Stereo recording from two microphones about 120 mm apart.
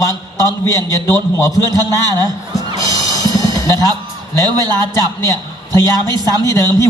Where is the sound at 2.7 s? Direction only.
30° left (ahead or behind).